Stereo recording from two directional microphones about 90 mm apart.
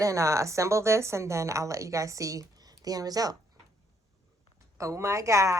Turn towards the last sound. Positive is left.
turn(degrees=-35)  # may be behind; listen again after turning